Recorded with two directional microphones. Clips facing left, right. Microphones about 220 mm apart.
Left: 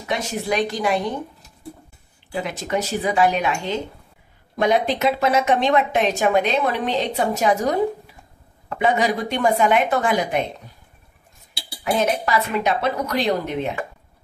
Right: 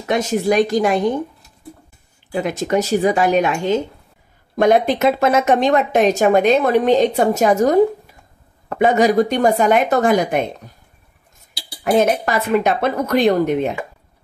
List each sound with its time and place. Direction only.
0.0 s speech: 45° right (ahead or behind)
2.4 s speech: 45° right (ahead or behind)
11.8 s speech: 50° right (ahead or behind)